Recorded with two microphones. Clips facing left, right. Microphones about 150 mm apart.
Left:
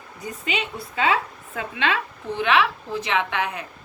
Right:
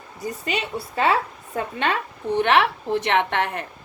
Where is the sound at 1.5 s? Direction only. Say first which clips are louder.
Right 1 dB; 50° right (ahead or behind).